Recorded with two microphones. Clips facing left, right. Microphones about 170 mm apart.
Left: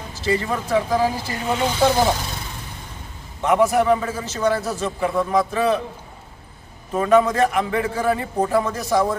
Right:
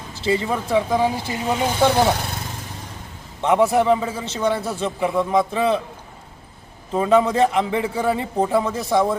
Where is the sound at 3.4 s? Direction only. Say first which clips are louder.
Even; 25° right (ahead or behind).